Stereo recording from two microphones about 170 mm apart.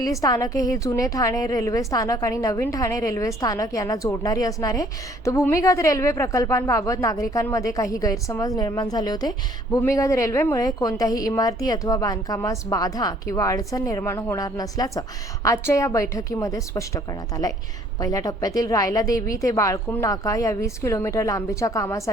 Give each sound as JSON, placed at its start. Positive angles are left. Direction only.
{"t": 0.0, "sound": "a woman's voice", "side_deg": 20}